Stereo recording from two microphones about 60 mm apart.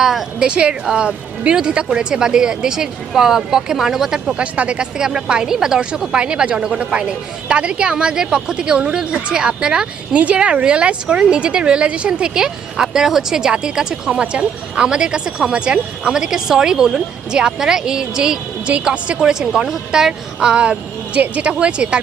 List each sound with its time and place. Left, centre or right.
0.0 s a woman's voice: centre
0.4 s speech: centre
19.2 s speech: centre